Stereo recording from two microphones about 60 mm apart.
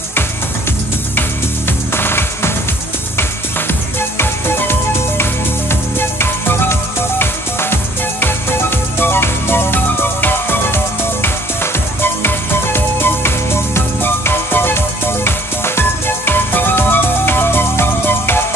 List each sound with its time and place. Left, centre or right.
2.0 s music: left
4.2 s music: left
11.2 s music: left